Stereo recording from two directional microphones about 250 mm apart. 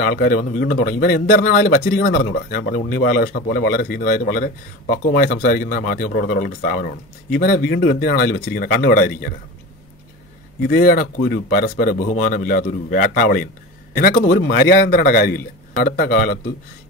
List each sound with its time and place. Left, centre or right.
0.0 s speech: left
10.6 s speech: left